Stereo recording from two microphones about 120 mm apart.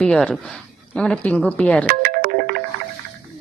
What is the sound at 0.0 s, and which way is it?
Speech, 5° left (ahead or behind).